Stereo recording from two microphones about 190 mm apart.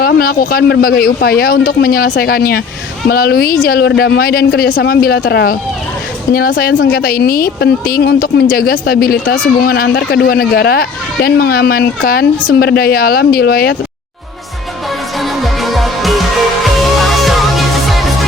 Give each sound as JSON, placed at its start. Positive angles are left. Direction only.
{"t": 0.0, "sound": "speech", "side_deg": 50}
{"t": 15.2, "sound": "music", "side_deg": 0}